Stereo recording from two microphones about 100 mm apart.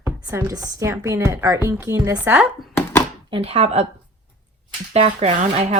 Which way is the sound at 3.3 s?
85° right.